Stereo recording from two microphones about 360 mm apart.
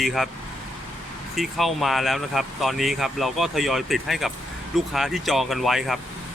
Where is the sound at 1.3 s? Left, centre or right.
Centre.